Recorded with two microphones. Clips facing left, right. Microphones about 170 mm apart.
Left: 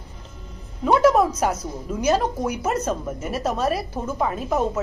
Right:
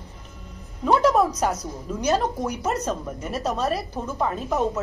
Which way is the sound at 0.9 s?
Centre (ahead or behind).